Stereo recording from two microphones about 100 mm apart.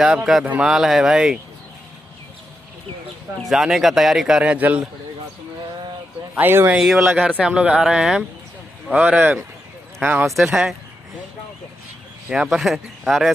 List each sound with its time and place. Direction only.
0.0 s speech: 5° right (ahead or behind)
3.4 s speech: 5° right (ahead or behind)
6.3 s speech: 20° right (ahead or behind)
6.8 s speech: 5° right (ahead or behind)
10.5 s speech: 5° right (ahead or behind)
12.3 s speech: 5° right (ahead or behind)